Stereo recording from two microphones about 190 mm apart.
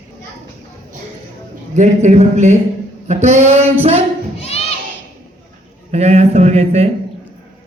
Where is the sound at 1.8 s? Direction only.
40° right (ahead or behind).